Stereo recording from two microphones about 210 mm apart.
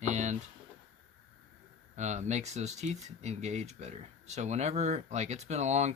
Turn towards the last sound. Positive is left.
turn(degrees=-30)  # may be behind; listen again after turning